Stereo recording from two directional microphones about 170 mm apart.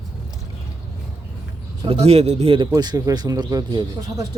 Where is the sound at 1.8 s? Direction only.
35° right (ahead or behind).